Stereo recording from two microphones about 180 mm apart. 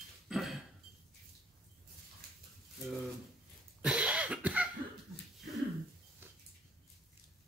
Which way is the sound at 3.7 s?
5° right (ahead or behind).